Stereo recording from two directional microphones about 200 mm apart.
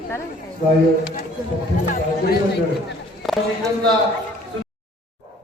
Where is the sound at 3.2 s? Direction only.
Centre (ahead or behind).